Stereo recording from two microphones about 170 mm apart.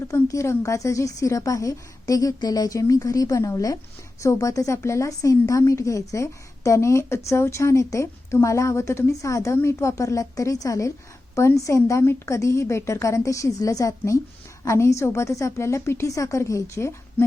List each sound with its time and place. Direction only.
0.1 s a woman's voice: 15° left (ahead or behind)